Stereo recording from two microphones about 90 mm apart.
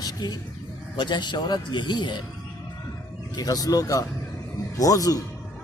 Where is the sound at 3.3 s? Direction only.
45° left (ahead or behind).